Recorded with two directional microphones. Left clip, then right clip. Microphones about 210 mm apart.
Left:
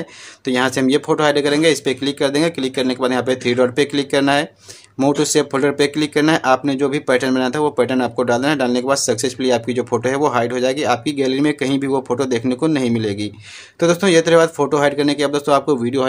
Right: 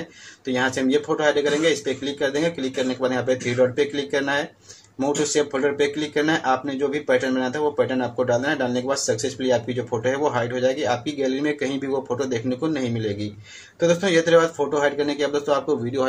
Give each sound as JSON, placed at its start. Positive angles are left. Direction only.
{"t": 0.5, "sound": "speech", "side_deg": 40}